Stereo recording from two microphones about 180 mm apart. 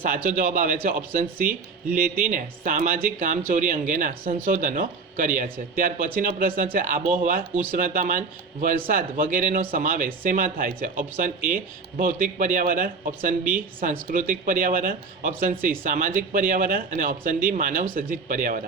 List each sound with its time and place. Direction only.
0.0 s speech: 50° right (ahead or behind)